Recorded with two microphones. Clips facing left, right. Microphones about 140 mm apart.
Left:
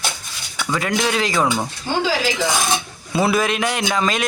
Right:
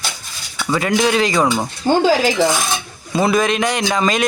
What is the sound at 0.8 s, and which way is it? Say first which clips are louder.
Speech: right 5 dB; centre (ahead or behind).